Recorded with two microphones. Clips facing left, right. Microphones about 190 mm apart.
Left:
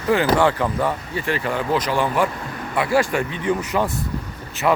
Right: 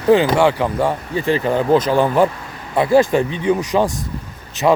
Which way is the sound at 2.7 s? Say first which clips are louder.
Right 6 dB; 25° right (ahead or behind).